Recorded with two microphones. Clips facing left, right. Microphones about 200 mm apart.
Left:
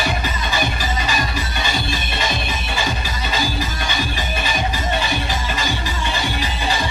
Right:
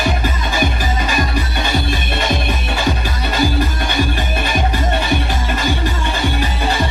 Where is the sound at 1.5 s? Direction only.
55° right (ahead or behind).